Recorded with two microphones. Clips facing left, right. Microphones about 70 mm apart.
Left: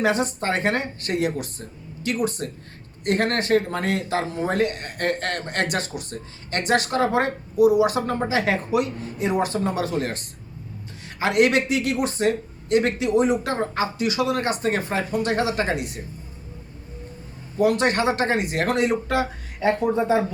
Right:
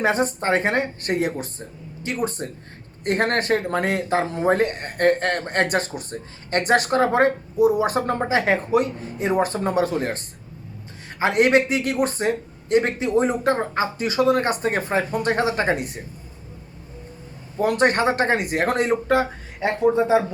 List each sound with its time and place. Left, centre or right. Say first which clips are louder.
0.0 s speech: right 1 dB; right
17.6 s speech: right 1 dB; right
19.5 s speech: right 2 dB; right